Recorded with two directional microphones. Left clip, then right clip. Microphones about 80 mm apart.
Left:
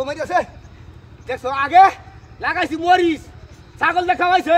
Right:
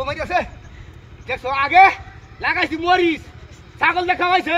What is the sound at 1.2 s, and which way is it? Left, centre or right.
A man's voice, left.